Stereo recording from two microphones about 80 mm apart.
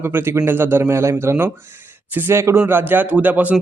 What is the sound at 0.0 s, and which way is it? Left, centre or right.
A man's voice, right.